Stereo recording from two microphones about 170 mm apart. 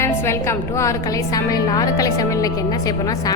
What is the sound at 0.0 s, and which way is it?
A woman's voice, 15° left (ahead or behind).